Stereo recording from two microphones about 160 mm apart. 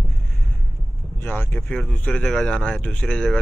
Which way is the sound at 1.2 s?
10° left (ahead or behind).